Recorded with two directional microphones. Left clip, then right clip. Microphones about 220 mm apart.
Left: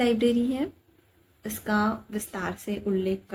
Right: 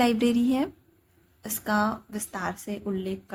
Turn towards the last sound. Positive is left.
turn(degrees=-25)  # may be behind; listen again after turning